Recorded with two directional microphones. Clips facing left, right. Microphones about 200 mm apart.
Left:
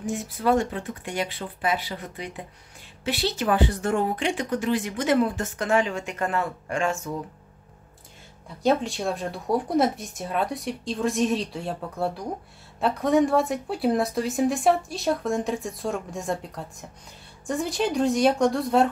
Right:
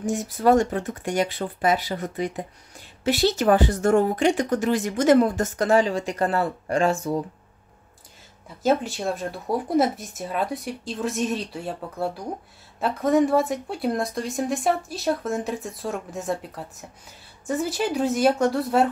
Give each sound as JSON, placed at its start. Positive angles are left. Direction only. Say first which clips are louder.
{"t": 0.0, "sound": "speech", "louder": "right 4 dB", "side_deg": -45}
{"t": 8.6, "sound": "speech", "louder": "right 1 dB", "side_deg": 0}